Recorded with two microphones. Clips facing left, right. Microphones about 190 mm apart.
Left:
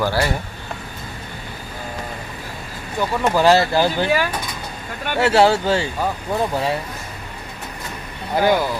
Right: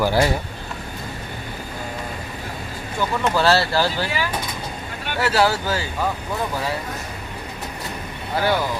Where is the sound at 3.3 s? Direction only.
15° left (ahead or behind).